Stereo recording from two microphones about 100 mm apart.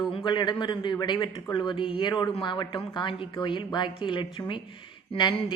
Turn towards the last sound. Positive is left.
turn(degrees=50)  # may be behind; listen again after turning